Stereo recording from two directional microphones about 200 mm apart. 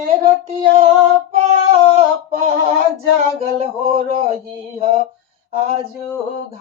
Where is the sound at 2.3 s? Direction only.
30° right (ahead or behind).